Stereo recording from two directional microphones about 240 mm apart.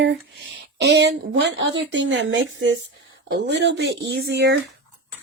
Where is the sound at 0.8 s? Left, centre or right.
Right.